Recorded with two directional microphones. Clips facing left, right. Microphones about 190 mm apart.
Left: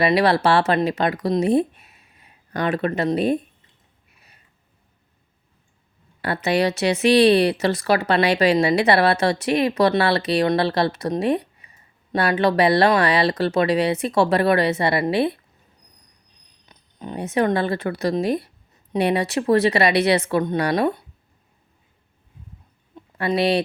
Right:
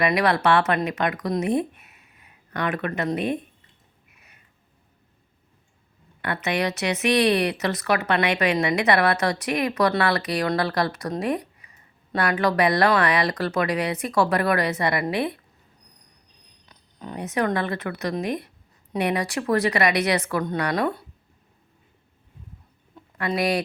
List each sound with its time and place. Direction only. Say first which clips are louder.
0.0 s speech: left 3 dB; 30° left (ahead or behind)
4.1 s a sound: left 2 dB; 35° left (ahead or behind)
6.2 s speech: left 5 dB; 30° left (ahead or behind)
16.6 s speech: left 3 dB; 20° left (ahead or behind)
23.0 s speech: left 4 dB; 25° left (ahead or behind)